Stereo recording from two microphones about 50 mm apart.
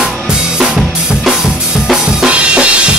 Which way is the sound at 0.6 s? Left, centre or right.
Centre.